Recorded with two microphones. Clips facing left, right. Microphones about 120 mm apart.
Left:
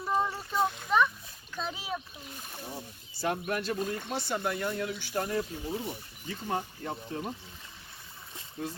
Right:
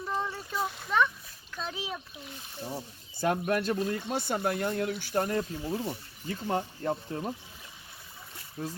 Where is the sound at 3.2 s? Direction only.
45° right (ahead or behind).